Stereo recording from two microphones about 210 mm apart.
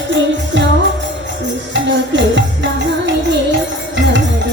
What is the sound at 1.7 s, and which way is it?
Music, 60° right (ahead or behind).